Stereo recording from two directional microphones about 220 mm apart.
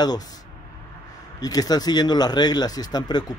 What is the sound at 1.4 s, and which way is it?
Speech, 15° left (ahead or behind).